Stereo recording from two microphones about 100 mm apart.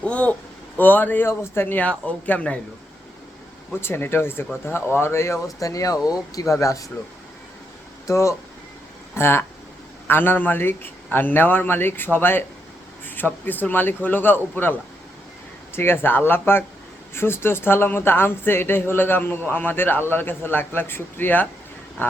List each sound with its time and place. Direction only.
0.0 s a sound: 10° left (ahead or behind)
0.8 s a man's voice: 20° left (ahead or behind)
3.7 s speech: 25° left (ahead or behind)
8.0 s speech: 30° left (ahead or behind)